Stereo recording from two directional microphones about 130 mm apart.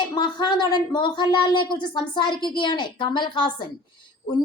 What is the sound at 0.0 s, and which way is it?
A woman's voice, 35° left (ahead or behind).